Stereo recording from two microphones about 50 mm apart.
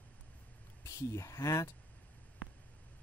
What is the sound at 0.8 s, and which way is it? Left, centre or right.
Speech, left.